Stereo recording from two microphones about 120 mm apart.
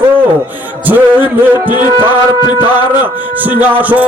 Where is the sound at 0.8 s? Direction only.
15° right (ahead or behind).